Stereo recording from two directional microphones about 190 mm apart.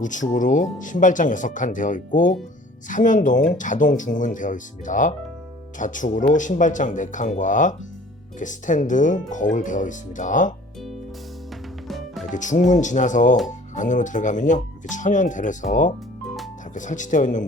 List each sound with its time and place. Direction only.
0.0 s speech: 40° left (ahead or behind)
11.9 s music: centre (ahead or behind)
12.3 s speech: 40° left (ahead or behind)